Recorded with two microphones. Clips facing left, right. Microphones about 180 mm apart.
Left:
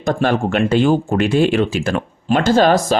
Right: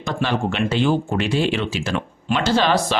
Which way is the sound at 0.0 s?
50° left (ahead or behind).